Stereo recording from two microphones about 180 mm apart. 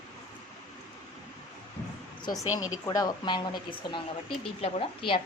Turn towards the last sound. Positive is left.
turn(degrees=30)  # may be behind; listen again after turning